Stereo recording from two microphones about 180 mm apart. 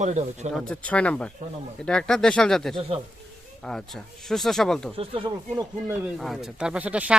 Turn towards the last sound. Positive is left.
turn(degrees=-10)  # may be behind; listen again after turning